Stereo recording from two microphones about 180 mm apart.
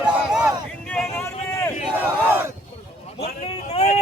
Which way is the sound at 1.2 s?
15° left (ahead or behind).